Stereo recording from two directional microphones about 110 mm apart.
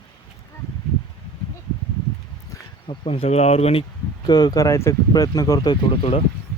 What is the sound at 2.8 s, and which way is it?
Speech, 60° left (ahead or behind).